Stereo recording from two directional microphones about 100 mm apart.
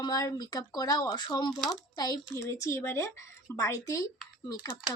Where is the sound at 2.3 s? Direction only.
25° left (ahead or behind).